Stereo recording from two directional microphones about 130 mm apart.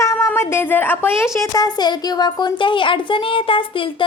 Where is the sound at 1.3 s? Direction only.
30° left (ahead or behind).